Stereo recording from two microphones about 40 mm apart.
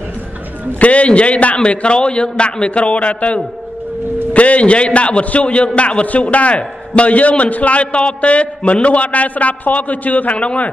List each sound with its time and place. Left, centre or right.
0.7 s a man's voice: left